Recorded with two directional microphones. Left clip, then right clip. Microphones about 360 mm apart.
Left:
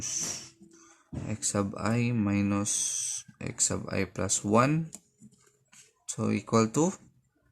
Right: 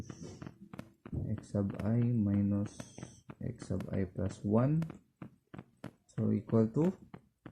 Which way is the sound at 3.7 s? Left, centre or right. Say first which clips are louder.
Left 2 dB; centre.